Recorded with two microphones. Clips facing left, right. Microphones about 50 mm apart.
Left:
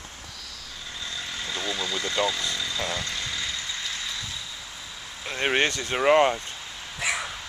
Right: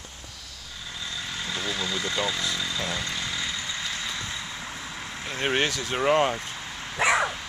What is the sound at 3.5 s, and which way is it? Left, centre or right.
Vehicle, centre.